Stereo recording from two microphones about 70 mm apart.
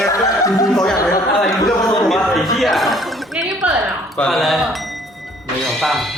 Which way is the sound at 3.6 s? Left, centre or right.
Right.